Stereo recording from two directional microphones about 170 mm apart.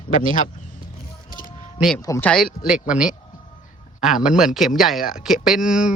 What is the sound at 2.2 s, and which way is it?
Speech, 5° left (ahead or behind).